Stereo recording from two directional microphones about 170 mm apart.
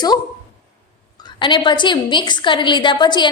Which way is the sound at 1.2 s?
25° left (ahead or behind).